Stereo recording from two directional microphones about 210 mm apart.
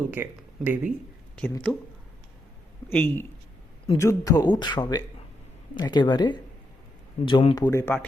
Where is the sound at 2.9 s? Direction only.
10° left (ahead or behind); by 7.6 s 25° left (ahead or behind).